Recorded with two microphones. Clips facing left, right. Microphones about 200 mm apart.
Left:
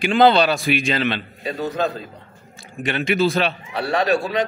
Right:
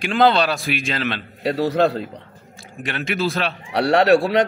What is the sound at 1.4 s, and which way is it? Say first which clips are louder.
Speech: right 6 dB; 80° right.